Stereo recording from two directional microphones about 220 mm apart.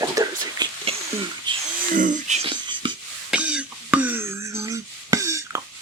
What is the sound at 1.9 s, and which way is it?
Speech, 35° right (ahead or behind).